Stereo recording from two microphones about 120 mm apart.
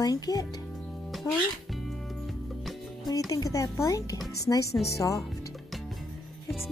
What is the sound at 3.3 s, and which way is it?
Speech, 30° left (ahead or behind).